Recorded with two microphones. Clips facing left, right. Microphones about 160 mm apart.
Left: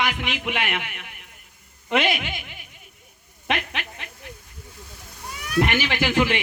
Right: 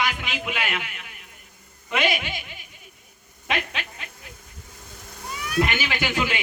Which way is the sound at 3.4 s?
60° left (ahead or behind).